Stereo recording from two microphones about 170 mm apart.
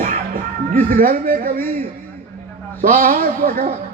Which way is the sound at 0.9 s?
60° right (ahead or behind).